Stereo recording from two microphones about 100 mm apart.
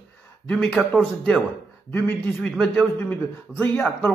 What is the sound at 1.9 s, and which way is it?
Speech, 20° left (ahead or behind).